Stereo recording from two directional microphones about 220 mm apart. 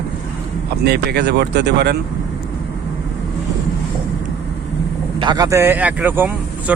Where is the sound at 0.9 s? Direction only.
50° right (ahead or behind).